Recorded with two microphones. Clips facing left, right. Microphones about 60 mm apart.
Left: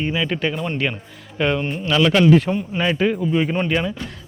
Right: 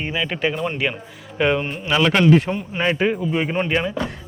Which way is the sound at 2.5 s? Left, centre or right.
Centre.